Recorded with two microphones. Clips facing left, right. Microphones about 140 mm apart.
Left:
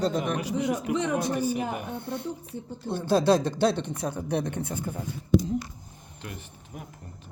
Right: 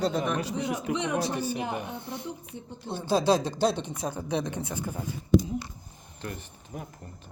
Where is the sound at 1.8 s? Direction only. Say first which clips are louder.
Left 3 dB; 55° left (ahead or behind).